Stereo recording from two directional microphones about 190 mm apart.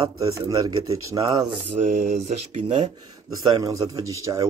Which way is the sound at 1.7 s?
40° right (ahead or behind).